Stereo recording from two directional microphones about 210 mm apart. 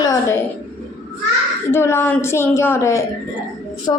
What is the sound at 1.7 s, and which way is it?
A woman's voice, 10° left (ahead or behind).